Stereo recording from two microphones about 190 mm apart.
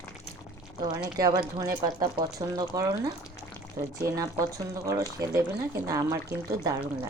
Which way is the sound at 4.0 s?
20° right (ahead or behind).